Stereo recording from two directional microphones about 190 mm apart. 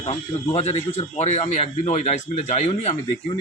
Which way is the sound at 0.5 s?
35° left (ahead or behind).